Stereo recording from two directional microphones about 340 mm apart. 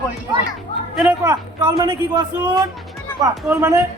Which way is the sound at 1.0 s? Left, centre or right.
Centre.